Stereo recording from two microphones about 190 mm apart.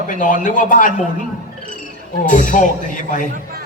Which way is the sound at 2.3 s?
40° left (ahead or behind).